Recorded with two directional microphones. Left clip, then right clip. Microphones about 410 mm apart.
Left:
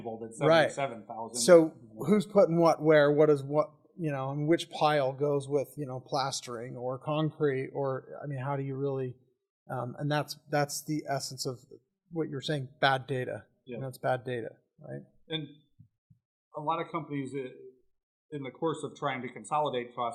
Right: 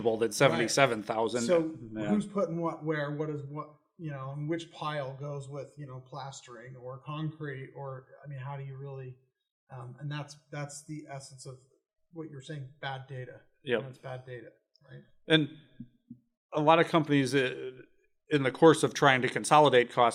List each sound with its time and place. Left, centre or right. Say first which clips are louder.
0.0 s speech: right 5 dB; right
2.0 s a man's voice: left 8 dB; left
16.6 s speech: right 9 dB; right